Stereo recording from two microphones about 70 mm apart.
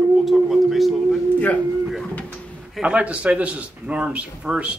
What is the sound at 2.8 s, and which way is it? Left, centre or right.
Speech, centre.